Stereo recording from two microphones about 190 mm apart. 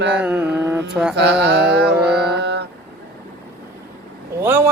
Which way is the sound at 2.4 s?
60° right (ahead or behind).